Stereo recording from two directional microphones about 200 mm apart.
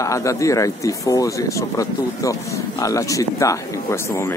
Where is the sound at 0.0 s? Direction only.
15° left (ahead or behind).